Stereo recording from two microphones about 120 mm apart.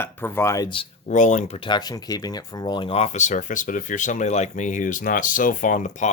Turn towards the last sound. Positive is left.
turn(degrees=90)